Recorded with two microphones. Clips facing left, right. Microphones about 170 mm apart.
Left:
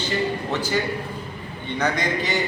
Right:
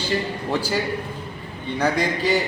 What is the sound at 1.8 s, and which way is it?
Speech, 10° right (ahead or behind).